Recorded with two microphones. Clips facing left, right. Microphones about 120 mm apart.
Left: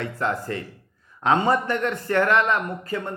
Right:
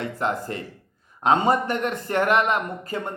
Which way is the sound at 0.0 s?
20° right (ahead or behind).